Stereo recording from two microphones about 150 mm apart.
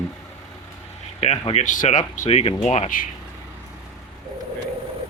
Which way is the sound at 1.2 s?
45° left (ahead or behind).